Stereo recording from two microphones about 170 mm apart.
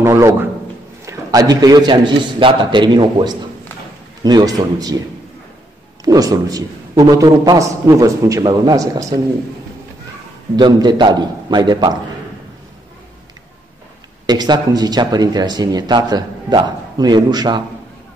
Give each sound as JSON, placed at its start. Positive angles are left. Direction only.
{"t": 0.0, "sound": "a sound", "side_deg": -15}
{"t": 1.0, "sound": "a man's voice", "side_deg": -20}
{"t": 6.0, "sound": "speech", "side_deg": -20}
{"t": 10.5, "sound": "speech", "side_deg": -25}
{"t": 14.2, "sound": "speech", "side_deg": -25}